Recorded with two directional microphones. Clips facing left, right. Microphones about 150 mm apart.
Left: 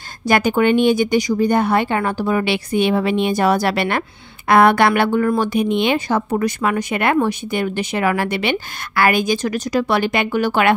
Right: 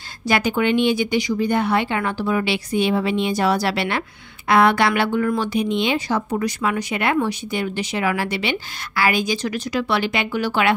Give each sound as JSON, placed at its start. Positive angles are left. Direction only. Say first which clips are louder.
{"t": 0.3, "sound": "speech", "louder": "left 4 dB", "side_deg": 50}